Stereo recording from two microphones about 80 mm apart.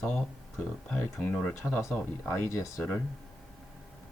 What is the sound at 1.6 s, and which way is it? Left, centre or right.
Speech, left.